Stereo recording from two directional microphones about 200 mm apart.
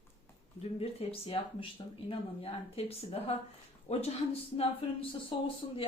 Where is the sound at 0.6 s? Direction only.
30° left (ahead or behind).